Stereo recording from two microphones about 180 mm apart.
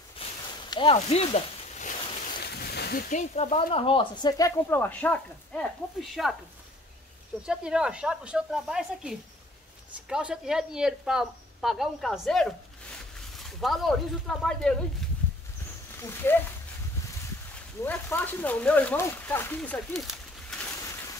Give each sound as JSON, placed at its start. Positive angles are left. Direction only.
{"t": 0.7, "sound": "a sound", "side_deg": 30}
{"t": 2.4, "sound": "speech", "side_deg": 65}
{"t": 7.4, "sound": "speech", "side_deg": -5}
{"t": 16.0, "sound": "speech", "side_deg": 15}
{"t": 17.8, "sound": "speech", "side_deg": 10}